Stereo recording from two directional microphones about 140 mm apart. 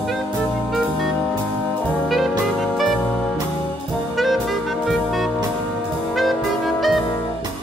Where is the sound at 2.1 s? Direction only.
Centre (ahead or behind).